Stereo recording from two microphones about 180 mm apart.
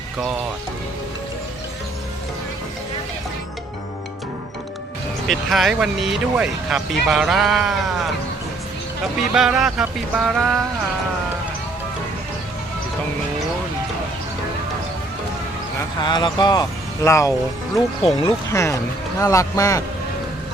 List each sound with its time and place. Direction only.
5.3 s speech: centre (ahead or behind)
9.3 s speech: 5° right (ahead or behind)
16.0 s speech: 25° left (ahead or behind)
18.0 s speech: 30° left (ahead or behind)
18.5 s speech: 15° left (ahead or behind)